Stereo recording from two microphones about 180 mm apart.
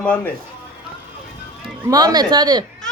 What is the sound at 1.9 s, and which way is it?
Speech, 20° right (ahead or behind).